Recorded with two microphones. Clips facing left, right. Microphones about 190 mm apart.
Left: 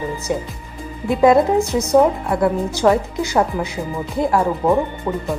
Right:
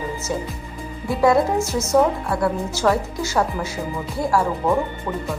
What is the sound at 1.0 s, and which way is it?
Speech, 20° left (ahead or behind).